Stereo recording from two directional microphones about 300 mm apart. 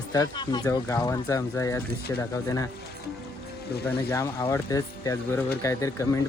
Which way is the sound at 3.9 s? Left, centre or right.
Centre.